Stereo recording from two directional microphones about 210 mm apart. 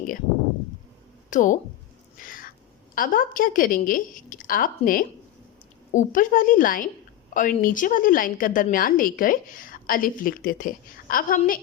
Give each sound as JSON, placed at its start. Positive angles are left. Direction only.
{"t": 1.3, "sound": "speech", "side_deg": 35}
{"t": 2.2, "sound": "cat", "side_deg": 40}
{"t": 2.9, "sound": "a woman's voice", "side_deg": 40}